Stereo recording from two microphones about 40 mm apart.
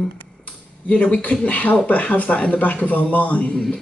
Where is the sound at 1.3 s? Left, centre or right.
Left.